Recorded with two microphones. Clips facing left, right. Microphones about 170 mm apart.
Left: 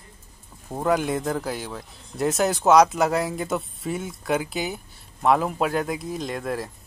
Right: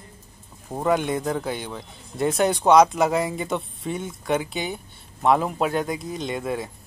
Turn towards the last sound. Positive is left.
turn(degrees=0)  # may be behind; listen again after turning